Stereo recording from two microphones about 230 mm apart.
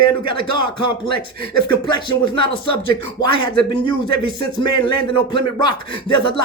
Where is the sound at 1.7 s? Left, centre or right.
Centre.